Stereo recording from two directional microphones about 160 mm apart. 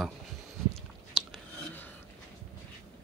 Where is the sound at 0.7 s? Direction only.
Centre (ahead or behind).